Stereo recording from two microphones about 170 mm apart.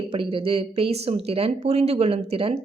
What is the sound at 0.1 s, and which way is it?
Speech, 30° right (ahead or behind).